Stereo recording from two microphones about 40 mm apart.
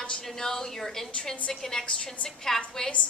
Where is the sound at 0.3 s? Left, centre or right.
Centre.